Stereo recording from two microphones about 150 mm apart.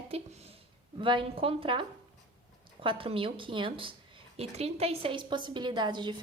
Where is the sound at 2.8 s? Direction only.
35° right (ahead or behind).